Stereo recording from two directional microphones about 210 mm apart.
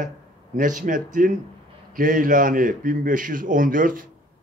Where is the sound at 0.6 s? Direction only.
40° right (ahead or behind).